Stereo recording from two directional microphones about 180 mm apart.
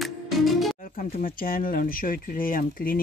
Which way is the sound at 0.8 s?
45° left (ahead or behind).